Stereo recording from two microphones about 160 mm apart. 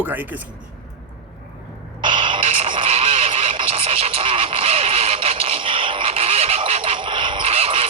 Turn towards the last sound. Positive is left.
turn(degrees=-40)  # may be behind; listen again after turning